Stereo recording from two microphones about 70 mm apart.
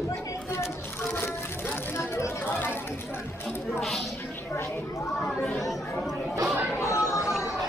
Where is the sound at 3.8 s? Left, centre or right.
Centre.